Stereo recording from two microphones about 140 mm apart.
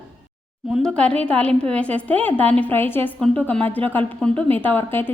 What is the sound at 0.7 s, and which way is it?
A woman's voice, 5° left (ahead or behind).